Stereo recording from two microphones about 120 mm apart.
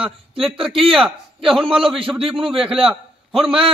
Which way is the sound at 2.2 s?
50° right (ahead or behind).